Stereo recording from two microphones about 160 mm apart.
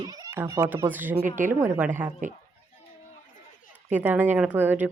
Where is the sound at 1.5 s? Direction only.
10° right (ahead or behind).